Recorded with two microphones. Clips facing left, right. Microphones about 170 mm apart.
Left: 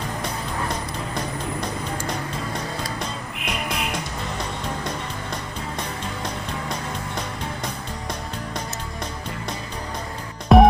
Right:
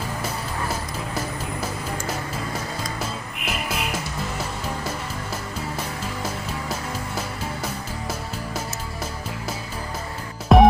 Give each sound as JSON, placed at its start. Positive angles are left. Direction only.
{"t": 1.6, "sound": "music", "side_deg": -5}
{"t": 10.5, "sound": "music", "side_deg": 0}